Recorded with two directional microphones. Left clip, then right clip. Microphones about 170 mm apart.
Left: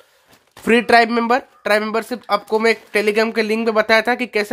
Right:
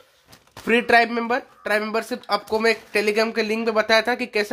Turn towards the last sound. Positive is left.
turn(degrees=25)  # may be behind; listen again after turning